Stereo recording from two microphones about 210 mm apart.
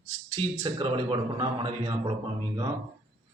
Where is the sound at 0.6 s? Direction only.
20° right (ahead or behind).